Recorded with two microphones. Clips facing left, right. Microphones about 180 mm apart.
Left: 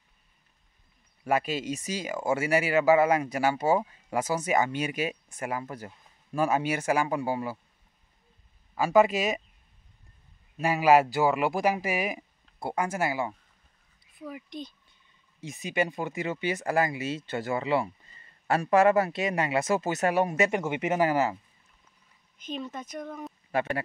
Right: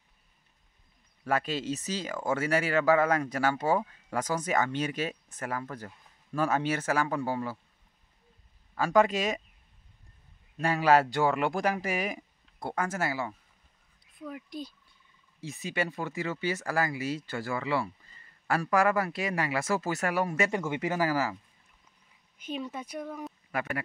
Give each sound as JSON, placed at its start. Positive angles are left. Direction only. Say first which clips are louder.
{"t": 1.2, "sound": "speech", "louder": "left 2 dB", "side_deg": 10}
{"t": 8.7, "sound": "speech", "louder": "left 2 dB", "side_deg": 10}
{"t": 10.6, "sound": "speech", "louder": "left 3 dB", "side_deg": 10}
{"t": 14.2, "sound": "speech", "louder": "even", "side_deg": 5}
{"t": 15.4, "sound": "speech", "louder": "left 3 dB", "side_deg": 15}
{"t": 22.4, "sound": "speech", "louder": "even", "side_deg": -10}
{"t": 23.5, "sound": "speech", "louder": "left 5 dB", "side_deg": 25}